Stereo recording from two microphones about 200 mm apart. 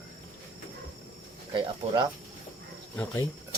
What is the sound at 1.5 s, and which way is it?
Speech, 25° right (ahead or behind).